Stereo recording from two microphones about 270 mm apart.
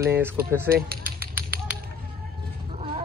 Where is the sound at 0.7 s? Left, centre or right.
Right.